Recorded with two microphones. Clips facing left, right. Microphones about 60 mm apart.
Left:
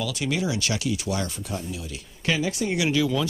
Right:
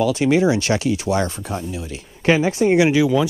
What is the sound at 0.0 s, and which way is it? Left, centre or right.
Speech, right.